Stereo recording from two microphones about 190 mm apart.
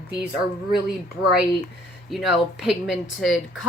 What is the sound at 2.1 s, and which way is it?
Speech, centre (ahead or behind).